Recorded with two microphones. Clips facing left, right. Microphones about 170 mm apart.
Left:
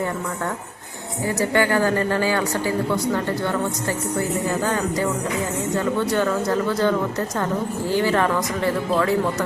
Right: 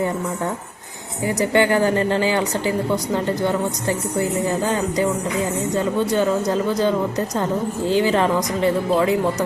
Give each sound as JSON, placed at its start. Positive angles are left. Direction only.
{"t": 1.3, "sound": "a woman's voice", "side_deg": -20}